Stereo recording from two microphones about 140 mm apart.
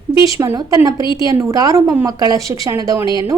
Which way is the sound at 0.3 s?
30° right (ahead or behind).